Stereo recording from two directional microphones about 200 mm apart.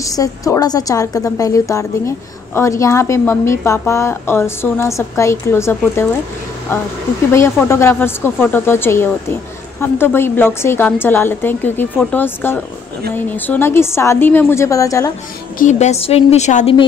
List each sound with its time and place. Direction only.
0.0 s a woman's voice: 15° left (ahead or behind)
15.6 s a woman's voice: 35° left (ahead or behind)